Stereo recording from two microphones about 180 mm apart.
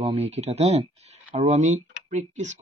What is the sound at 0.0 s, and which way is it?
Speech, 35° right (ahead or behind).